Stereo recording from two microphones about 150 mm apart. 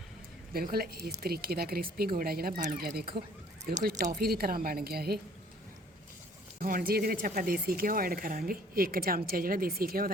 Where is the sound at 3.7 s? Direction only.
80° right.